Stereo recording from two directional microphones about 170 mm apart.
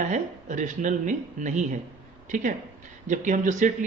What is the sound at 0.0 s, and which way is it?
Speech, 45° right (ahead or behind).